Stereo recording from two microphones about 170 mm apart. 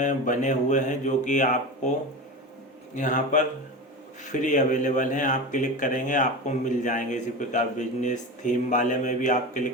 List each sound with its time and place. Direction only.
0.0 s speech: 50° left (ahead or behind)
2.9 s speech: 50° left (ahead or behind)